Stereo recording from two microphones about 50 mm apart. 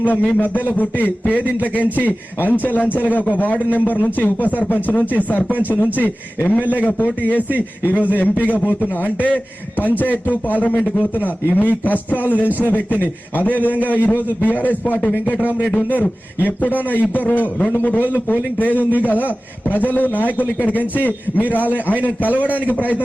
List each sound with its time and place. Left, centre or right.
0.0 s a man's voice: left
10.0 s a man's voice: left